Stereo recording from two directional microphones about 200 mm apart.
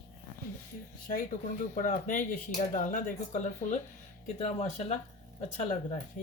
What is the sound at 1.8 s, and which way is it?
Speech, 40° left (ahead or behind).